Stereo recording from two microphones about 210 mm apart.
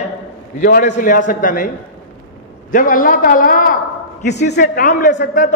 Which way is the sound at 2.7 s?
40° left (ahead or behind).